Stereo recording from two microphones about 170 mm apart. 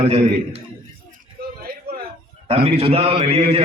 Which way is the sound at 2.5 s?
35° right (ahead or behind).